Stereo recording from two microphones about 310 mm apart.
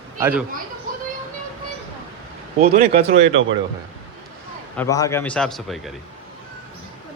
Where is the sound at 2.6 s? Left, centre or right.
Right.